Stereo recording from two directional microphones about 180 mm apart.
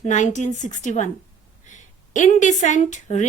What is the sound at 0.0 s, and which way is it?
A woman's voice, 40° left (ahead or behind).